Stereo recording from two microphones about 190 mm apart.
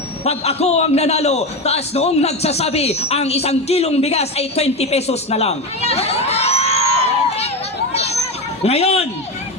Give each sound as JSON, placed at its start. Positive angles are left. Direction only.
{"t": 0.3, "sound": "a man's voice", "side_deg": 35}
{"t": 7.9, "sound": "hubbub", "side_deg": 35}
{"t": 8.6, "sound": "a man's voice", "side_deg": 30}